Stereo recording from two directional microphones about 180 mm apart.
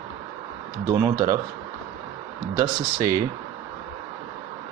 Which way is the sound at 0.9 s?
15° right (ahead or behind).